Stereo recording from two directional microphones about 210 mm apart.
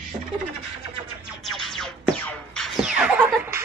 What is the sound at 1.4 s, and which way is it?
Music, centre (ahead or behind).